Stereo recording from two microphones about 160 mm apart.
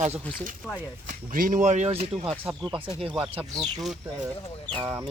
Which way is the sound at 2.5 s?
5° right (ahead or behind).